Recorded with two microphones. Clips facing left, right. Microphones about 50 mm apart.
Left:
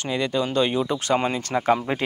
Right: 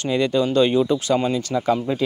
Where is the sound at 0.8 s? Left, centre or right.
Left.